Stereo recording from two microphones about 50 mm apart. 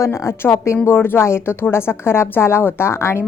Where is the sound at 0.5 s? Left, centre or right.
Left.